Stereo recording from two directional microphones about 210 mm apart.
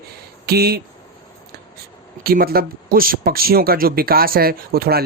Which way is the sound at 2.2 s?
45° right (ahead or behind).